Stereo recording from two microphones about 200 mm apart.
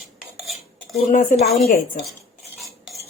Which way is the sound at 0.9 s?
40° left (ahead or behind).